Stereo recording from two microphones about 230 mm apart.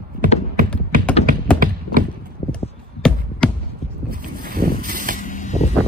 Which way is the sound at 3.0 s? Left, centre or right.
Centre.